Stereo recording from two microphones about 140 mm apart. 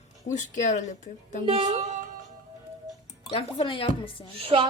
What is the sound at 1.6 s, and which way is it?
Speech, 55° right (ahead or behind).